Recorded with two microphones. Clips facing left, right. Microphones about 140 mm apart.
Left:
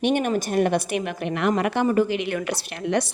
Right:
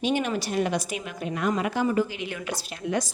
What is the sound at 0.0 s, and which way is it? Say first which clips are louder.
A woman's voice: left 4 dB; 55° left (ahead or behind).